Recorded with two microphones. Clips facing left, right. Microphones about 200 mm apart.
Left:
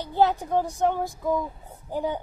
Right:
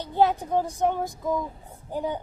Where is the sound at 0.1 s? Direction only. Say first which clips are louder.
Even; 20° right (ahead or behind).